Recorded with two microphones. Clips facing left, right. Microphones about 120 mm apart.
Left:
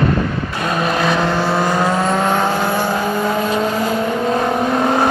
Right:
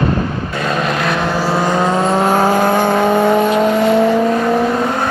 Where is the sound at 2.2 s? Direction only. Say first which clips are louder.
Right 4 dB; 40° right (ahead or behind); by 3.3 s 65° right (ahead or behind).